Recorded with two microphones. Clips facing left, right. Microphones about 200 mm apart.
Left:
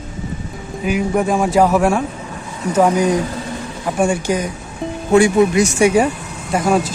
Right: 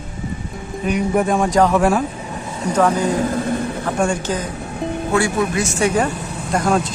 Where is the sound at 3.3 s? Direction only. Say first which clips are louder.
Right 6 dB; 55° right (ahead or behind).